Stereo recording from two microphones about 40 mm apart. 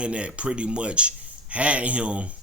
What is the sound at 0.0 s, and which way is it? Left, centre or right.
Speech, right.